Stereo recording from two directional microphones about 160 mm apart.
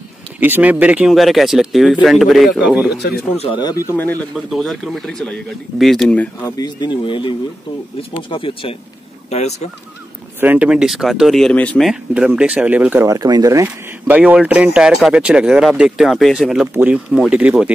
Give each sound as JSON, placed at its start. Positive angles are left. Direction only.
{"t": 0.4, "sound": "speech", "side_deg": -10}
{"t": 2.9, "sound": "speech", "side_deg": 90}
{"t": 3.3, "sound": "speech", "side_deg": 30}
{"t": 4.5, "sound": "speech", "side_deg": 0}
{"t": 6.4, "sound": "speech", "side_deg": 25}
{"t": 9.3, "sound": "speech", "side_deg": 45}
{"t": 10.4, "sound": "speech", "side_deg": -10}
{"t": 11.9, "sound": "speech", "side_deg": -5}
{"t": 14.1, "sound": "speech", "side_deg": -10}